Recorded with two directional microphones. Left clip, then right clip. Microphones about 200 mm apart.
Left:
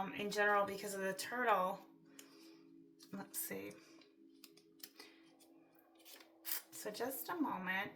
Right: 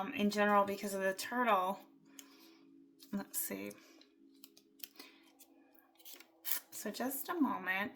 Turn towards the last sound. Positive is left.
turn(degrees=-45)  # may be behind; listen again after turning